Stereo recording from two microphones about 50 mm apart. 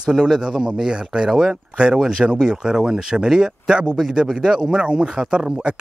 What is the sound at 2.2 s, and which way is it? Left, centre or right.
Speech, centre.